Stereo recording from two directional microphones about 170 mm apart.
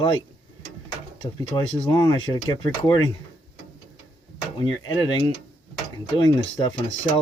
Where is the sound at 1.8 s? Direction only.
25° left (ahead or behind).